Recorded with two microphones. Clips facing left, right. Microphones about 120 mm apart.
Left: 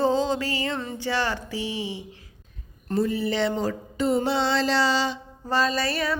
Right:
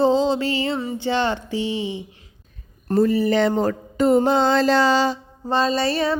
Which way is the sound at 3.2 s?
50° right (ahead or behind).